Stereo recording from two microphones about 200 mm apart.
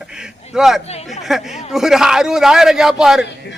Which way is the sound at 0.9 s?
30° left (ahead or behind).